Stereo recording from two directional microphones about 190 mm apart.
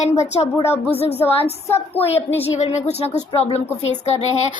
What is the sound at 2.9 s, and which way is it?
A woman's voice, 35° left (ahead or behind).